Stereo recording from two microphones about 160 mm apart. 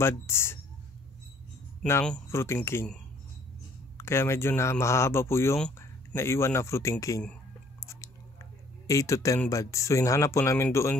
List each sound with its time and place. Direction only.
0.0 s speech: 15° left (ahead or behind)
1.8 s speech: 5° left (ahead or behind)
2.3 s speech: 15° left (ahead or behind)
4.0 s speech: 15° left (ahead or behind)
7.8 s squish: 20° left (ahead or behind)
8.8 s speech: 20° left (ahead or behind)